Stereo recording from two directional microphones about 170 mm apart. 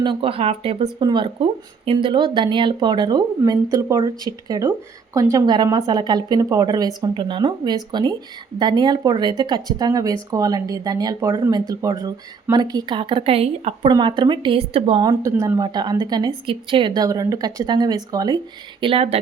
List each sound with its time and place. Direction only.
0.0 s a woman's voice: 30° right (ahead or behind)
15.2 s a woman's voice: 20° right (ahead or behind)
18.8 s speech: 35° right (ahead or behind)